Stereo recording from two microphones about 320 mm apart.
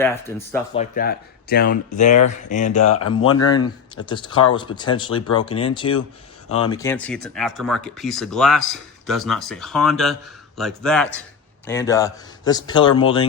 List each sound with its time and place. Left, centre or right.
0.0 s a man's voice: centre
0.8 s speech: left
2.8 s speech: left
3.9 s a man's voice: centre